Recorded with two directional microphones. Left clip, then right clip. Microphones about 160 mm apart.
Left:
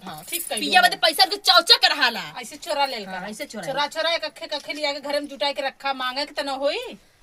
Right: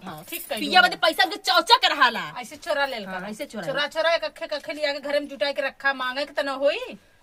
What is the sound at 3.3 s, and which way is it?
Speech, 20° right (ahead or behind).